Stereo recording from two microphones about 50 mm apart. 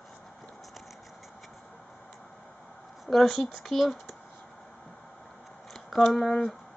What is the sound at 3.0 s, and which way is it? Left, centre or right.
Speech, centre.